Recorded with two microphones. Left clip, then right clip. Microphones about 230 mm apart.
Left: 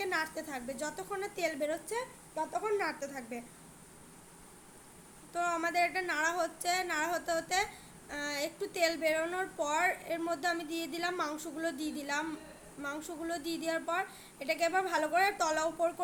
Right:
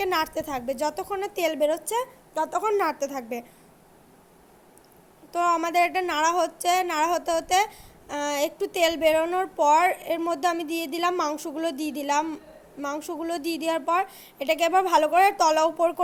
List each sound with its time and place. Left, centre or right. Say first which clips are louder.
0.0 s a woman's voice: right 9 dB; right
5.3 s a woman's voice: right 10 dB; right